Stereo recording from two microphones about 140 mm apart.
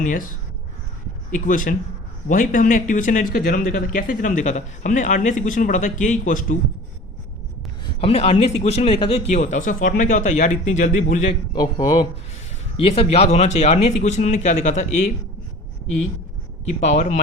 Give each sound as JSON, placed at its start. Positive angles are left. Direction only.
{"t": 0.0, "sound": "a man's voice", "side_deg": 75}
{"t": 1.3, "sound": "a man's voice", "side_deg": 70}
{"t": 8.0, "sound": "speech", "side_deg": 45}
{"t": 11.5, "sound": "speech", "side_deg": 30}
{"t": 12.7, "sound": "speech", "side_deg": 40}
{"t": 16.8, "sound": "speech", "side_deg": 55}